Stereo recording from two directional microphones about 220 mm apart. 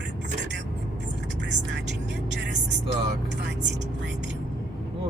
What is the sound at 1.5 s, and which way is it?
Speech, 50° right (ahead or behind).